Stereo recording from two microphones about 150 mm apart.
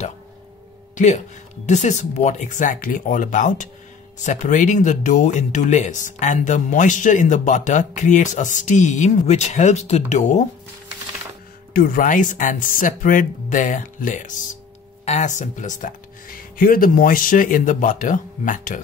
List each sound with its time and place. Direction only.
0.9 s speech: 50° left (ahead or behind)
11.7 s speech: 75° left (ahead or behind)